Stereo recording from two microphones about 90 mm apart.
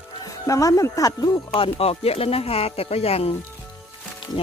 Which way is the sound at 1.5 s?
90° left.